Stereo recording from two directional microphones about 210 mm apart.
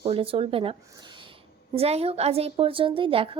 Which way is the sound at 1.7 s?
30° right (ahead or behind).